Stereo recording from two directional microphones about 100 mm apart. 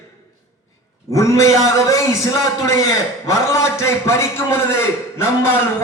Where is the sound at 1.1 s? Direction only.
30° left (ahead or behind).